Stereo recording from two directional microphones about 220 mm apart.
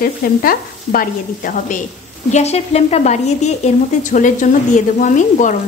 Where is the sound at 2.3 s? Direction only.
30° left (ahead or behind).